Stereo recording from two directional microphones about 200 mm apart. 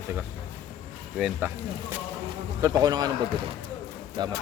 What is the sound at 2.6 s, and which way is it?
Speech, 20° right (ahead or behind).